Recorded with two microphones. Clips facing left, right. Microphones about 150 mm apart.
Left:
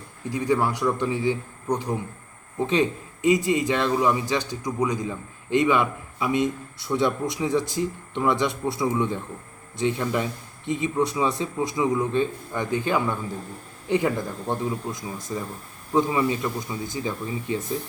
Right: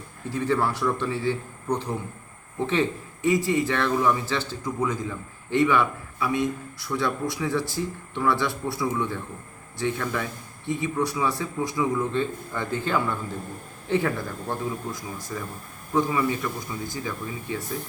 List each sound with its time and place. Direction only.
0.3 s a man's voice: 15° left (ahead or behind)